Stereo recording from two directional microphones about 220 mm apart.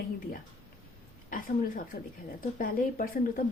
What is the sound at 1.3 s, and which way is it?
A woman's voice, 40° left (ahead or behind).